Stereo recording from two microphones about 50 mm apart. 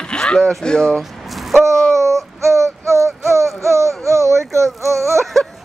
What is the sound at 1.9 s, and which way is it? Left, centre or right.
Child singing, right.